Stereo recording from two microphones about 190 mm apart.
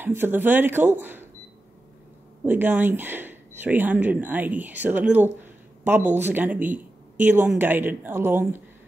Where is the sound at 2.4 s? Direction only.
10° right (ahead or behind).